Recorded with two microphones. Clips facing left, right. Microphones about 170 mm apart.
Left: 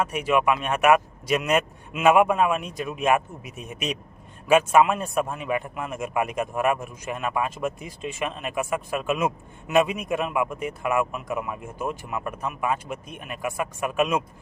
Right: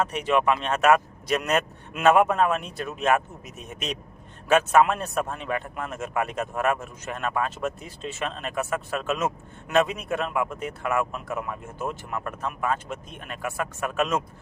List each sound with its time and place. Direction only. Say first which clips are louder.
0.0 s a man's voice: left 1 dB; 10° left (ahead or behind)